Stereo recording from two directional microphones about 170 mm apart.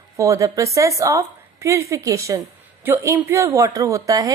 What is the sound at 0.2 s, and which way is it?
A woman's voice, 20° right (ahead or behind).